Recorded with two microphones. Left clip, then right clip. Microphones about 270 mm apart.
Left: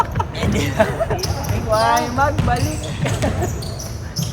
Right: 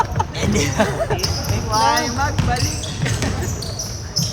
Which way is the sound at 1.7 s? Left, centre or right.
Centre.